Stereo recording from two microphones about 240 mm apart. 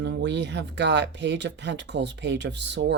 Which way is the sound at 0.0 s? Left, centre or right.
Right.